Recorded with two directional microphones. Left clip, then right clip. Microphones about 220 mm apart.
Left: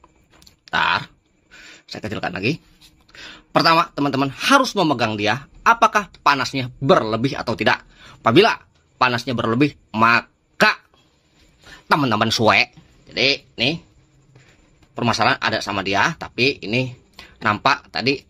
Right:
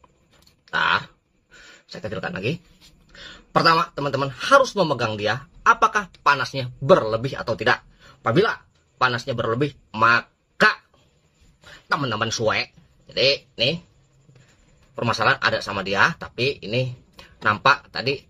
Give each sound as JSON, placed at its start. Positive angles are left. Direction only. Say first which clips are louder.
{"t": 0.7, "sound": "a sound", "louder": "left 2 dB", "side_deg": 35}
{"t": 3.2, "sound": "speech", "louder": "left 2 dB", "side_deg": 35}
{"t": 11.9, "sound": "a man's voice", "louder": "left 6 dB", "side_deg": 35}
{"t": 15.0, "sound": "speech", "louder": "left 2 dB", "side_deg": 30}